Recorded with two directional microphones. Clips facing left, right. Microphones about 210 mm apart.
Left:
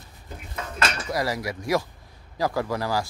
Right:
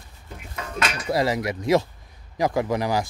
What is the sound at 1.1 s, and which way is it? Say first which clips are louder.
Speech: right 4 dB; 20° right (ahead or behind).